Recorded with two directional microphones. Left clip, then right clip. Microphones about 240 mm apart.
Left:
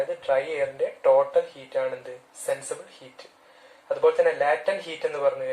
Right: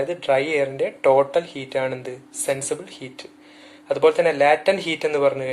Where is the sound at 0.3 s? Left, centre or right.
Right.